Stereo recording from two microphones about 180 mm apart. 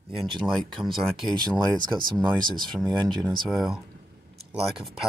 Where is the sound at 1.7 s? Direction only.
25° right (ahead or behind).